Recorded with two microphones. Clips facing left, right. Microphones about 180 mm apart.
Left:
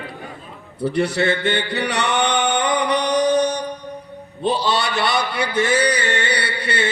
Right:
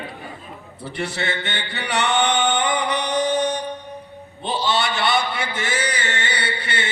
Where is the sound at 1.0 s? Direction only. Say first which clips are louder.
Left 6 dB; 60° left (ahead or behind).